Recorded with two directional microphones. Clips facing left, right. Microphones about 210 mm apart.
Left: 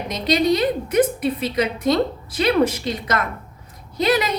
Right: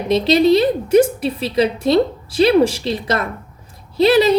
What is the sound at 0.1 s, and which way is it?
A woman's voice, 30° right (ahead or behind).